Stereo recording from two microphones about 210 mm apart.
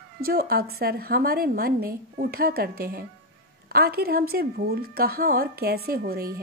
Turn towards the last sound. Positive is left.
turn(degrees=-45)  # may be behind; listen again after turning